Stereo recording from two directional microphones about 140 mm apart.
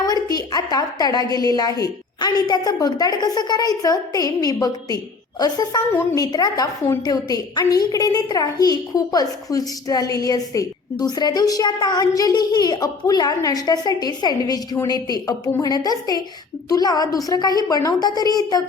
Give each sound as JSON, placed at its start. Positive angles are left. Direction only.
{"t": 0.0, "sound": "a woman's voice", "side_deg": 30}
{"t": 5.9, "sound": "a woman's voice", "side_deg": 15}
{"t": 6.2, "sound": "a woman's voice", "side_deg": 25}